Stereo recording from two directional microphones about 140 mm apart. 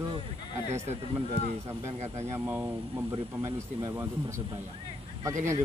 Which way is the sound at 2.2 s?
15° right (ahead or behind).